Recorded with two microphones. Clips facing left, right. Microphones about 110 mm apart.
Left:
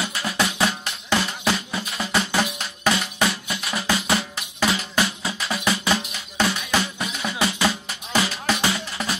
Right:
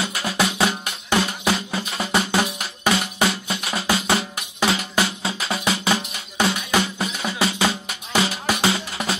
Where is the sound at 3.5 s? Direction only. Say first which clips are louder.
Right 2 dB; 25° right (ahead or behind).